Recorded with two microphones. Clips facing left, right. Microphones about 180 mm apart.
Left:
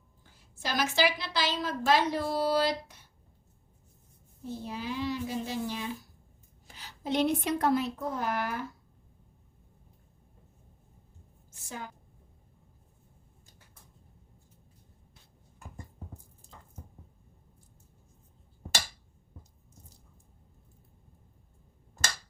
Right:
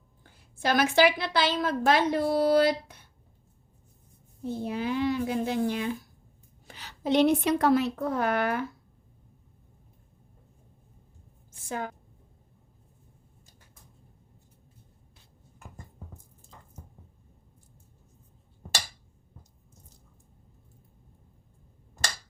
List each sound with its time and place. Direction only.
0.2 s a woman's voice: 60° right (ahead or behind)
4.4 s a woman's voice: 55° right (ahead or behind)
6.7 s a woman's voice: 70° right (ahead or behind)
11.7 s a woman's voice: 60° right (ahead or behind)